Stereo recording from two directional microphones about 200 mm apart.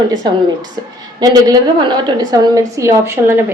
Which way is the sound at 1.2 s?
20° right (ahead or behind).